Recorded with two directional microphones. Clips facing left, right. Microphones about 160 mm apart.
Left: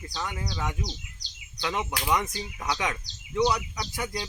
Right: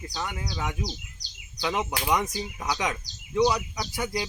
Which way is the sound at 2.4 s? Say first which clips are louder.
Right 1 dB; 15° right (ahead or behind).